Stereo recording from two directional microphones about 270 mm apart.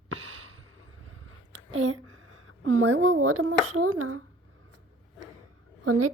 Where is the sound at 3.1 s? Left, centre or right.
Right.